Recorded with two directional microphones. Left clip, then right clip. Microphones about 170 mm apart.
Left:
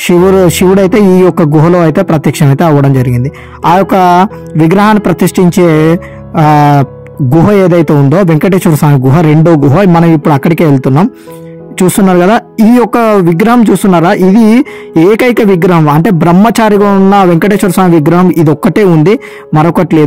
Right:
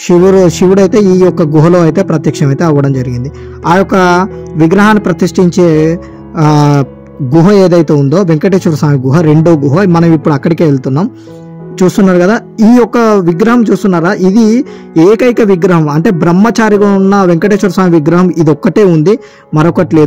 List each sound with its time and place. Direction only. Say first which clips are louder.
0.0 s a man's voice: even; 30° left (ahead or behind)